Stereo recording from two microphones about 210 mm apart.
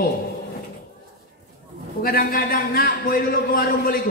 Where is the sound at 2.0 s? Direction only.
45° left (ahead or behind).